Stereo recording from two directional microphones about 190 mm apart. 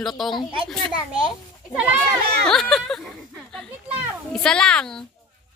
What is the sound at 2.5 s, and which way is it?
Speech, 5° left (ahead or behind).